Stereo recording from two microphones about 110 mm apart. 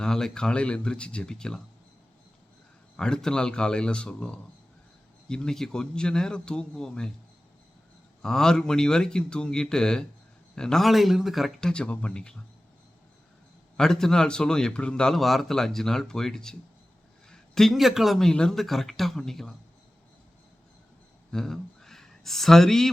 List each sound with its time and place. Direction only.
0.0 s speech: 5° left (ahead or behind)
3.0 s speech: 5° left (ahead or behind)
8.2 s a man's voice: 5° left (ahead or behind)
13.7 s a man's voice: 5° left (ahead or behind)
21.3 s speech: 5° left (ahead or behind)